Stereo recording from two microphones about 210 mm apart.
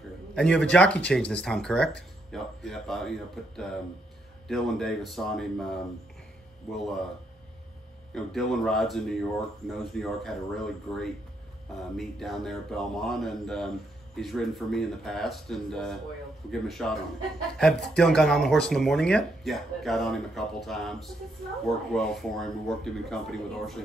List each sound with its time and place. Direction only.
0.3 s speech: 5° left (ahead or behind)
8.1 s speech: centre (ahead or behind)